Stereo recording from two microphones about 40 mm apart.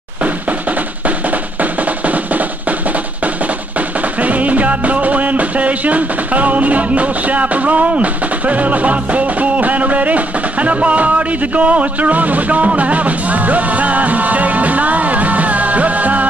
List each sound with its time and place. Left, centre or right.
1.6 s drum: right
4.2 s music: right